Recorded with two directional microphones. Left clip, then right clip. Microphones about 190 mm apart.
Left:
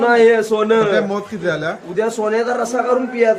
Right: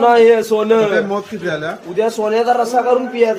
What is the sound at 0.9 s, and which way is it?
Speech, 30° left (ahead or behind).